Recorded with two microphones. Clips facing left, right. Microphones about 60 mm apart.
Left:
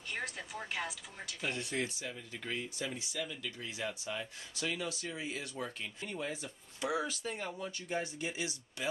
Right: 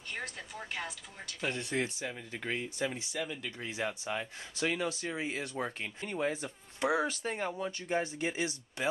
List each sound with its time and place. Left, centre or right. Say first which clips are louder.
0.1 s speech: left 1 dB; centre
1.5 s speech: right 3 dB; right